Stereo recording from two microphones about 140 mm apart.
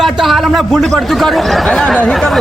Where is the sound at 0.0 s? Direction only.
Centre (ahead or behind).